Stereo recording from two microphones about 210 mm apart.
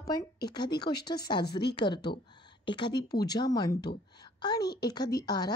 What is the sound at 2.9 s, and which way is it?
A woman's voice, 20° left (ahead or behind).